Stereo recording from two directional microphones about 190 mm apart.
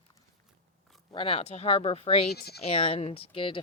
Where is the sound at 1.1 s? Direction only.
30° left (ahead or behind).